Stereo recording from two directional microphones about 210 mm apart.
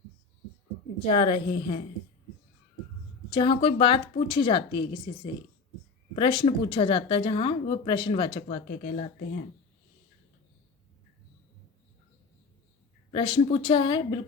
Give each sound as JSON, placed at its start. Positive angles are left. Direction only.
{"t": 1.0, "sound": "speech", "side_deg": 25}
{"t": 3.2, "sound": "speech", "side_deg": 25}
{"t": 8.4, "sound": "speech", "side_deg": 35}
{"t": 13.1, "sound": "speech", "side_deg": 25}